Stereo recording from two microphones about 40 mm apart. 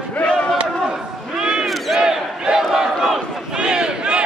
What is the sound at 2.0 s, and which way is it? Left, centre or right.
Battle cry, centre.